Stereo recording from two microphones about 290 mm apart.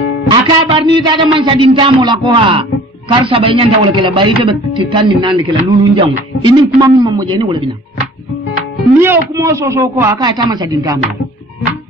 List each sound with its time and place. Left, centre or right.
0.3 s music: centre
0.9 s a man's voice: centre
9.0 s a man's voice: centre